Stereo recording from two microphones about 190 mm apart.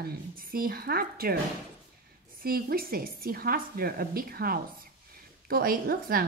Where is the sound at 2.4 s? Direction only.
50° right (ahead or behind).